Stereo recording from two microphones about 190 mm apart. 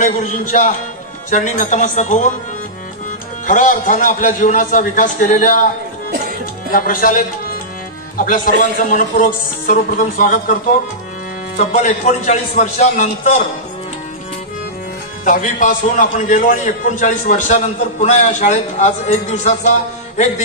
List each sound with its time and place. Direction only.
0.0 s a man's voice: 40° left (ahead or behind)
3.4 s speech: 45° left (ahead or behind)
6.7 s speech: 50° left (ahead or behind)
11.5 s a man's voice: 40° left (ahead or behind)
15.2 s a man's voice: 45° left (ahead or behind)